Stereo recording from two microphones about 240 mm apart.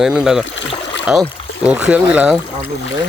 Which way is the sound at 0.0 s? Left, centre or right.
Centre.